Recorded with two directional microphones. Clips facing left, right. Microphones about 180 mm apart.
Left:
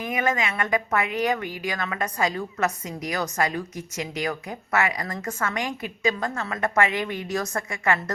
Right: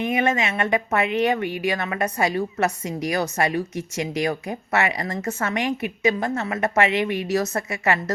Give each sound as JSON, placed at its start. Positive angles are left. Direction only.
{"t": 0.0, "sound": "a woman's voice", "side_deg": -25}